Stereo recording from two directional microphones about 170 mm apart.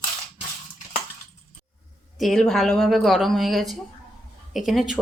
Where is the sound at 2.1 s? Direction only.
Centre (ahead or behind).